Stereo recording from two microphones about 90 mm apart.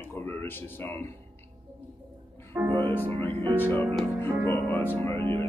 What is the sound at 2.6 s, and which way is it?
Speech, 15° right (ahead or behind).